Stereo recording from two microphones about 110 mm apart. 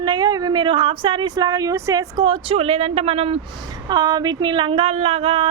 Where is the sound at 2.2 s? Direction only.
55° right (ahead or behind).